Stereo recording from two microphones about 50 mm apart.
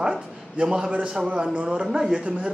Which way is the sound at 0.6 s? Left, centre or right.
Centre.